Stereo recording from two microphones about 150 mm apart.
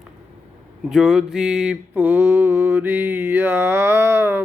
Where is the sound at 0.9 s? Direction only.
5° right (ahead or behind).